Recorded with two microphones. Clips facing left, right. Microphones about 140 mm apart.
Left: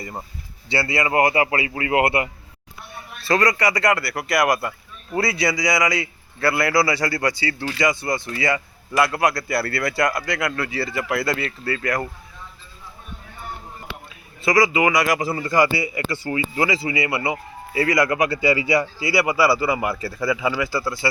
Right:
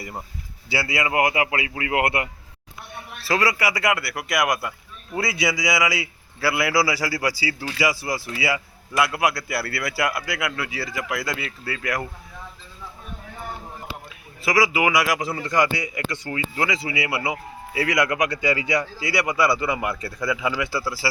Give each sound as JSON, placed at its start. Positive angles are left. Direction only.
{"t": 0.7, "sound": "a man's voice", "side_deg": -5}
{"t": 13.9, "sound": "a sound", "side_deg": 60}
{"t": 14.4, "sound": "a man's voice", "side_deg": 0}